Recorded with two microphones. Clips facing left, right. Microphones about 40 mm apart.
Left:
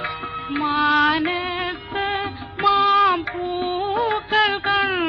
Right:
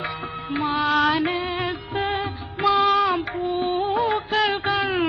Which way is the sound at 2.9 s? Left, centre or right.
Centre.